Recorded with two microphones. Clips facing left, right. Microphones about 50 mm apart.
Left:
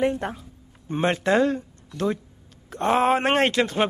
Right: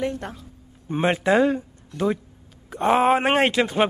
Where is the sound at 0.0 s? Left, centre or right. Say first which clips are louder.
Left 4 dB; left.